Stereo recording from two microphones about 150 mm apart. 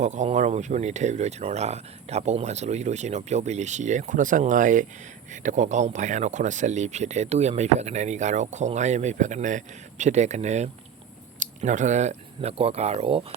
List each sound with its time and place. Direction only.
0.0 s speech: 55° right (ahead or behind)